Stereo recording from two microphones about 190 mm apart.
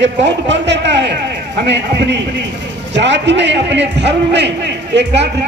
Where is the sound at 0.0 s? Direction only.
70° right (ahead or behind).